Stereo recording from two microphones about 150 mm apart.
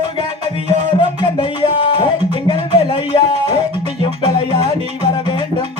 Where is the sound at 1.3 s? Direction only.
35° left (ahead or behind).